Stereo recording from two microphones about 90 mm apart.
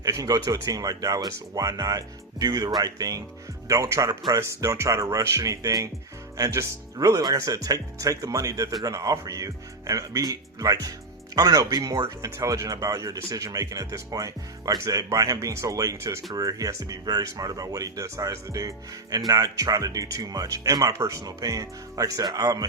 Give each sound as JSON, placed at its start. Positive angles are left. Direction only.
{"t": 0.0, "sound": "speech", "side_deg": -40}